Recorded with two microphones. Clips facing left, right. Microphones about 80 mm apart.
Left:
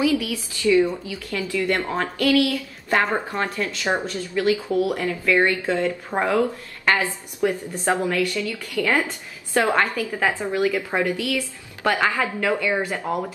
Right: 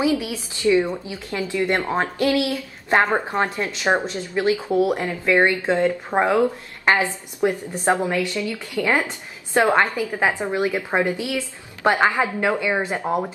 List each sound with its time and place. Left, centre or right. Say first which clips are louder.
0.0 s speech: even; right